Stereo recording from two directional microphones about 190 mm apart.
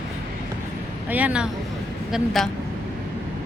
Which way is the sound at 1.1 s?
5° right (ahead or behind).